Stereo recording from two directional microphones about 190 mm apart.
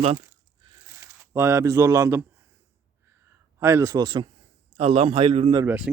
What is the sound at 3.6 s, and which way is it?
A man's voice, 15° right (ahead or behind).